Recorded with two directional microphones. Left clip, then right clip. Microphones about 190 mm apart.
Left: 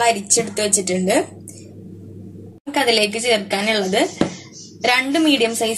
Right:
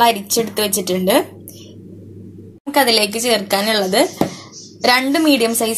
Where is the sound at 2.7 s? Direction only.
30° right (ahead or behind).